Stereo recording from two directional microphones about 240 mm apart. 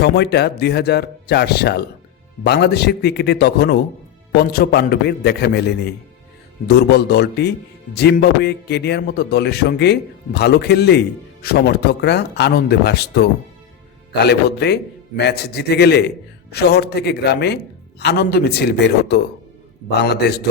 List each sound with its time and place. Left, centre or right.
0.0 s a man's voice: left